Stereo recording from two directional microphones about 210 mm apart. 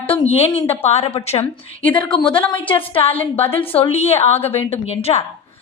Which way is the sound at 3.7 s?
30° left (ahead or behind).